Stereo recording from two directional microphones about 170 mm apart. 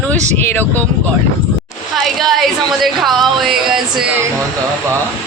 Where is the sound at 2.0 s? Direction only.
Centre (ahead or behind).